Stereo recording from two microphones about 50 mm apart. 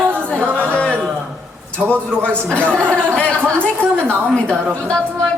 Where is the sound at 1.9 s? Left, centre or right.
Left.